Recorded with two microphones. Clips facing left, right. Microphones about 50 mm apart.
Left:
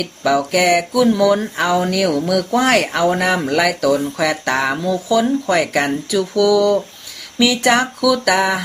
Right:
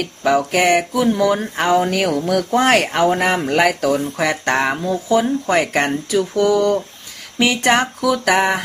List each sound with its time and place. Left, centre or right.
0.3 s speech: right
4.5 s speech: right